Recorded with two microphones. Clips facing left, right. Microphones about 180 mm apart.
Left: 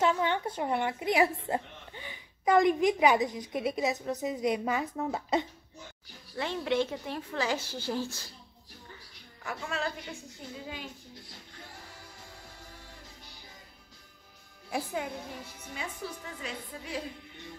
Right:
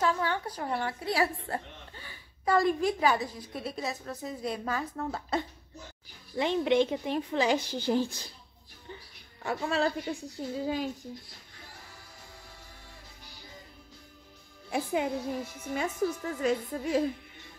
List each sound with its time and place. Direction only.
0.0 s a woman's voice: 20° left (ahead or behind)
6.3 s a woman's voice: 20° right (ahead or behind)
9.4 s a woman's voice: 30° right (ahead or behind)
15.7 s a woman's voice: 50° right (ahead or behind)